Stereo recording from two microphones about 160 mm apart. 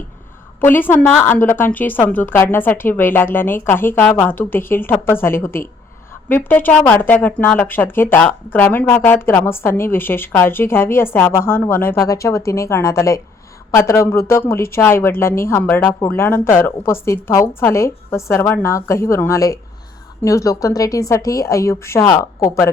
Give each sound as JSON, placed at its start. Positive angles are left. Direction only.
{"t": 0.6, "sound": "a woman's voice", "side_deg": 10}